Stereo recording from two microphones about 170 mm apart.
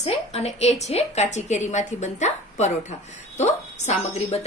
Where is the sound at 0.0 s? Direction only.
40° left (ahead or behind).